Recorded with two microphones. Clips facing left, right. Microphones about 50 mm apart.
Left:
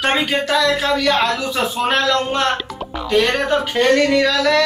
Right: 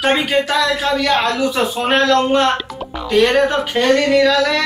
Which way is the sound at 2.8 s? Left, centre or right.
Centre.